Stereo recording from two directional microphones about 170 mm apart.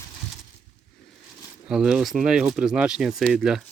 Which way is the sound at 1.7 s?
5° right (ahead or behind).